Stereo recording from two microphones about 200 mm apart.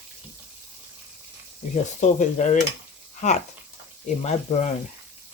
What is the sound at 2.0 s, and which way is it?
Speech, 35° left (ahead or behind).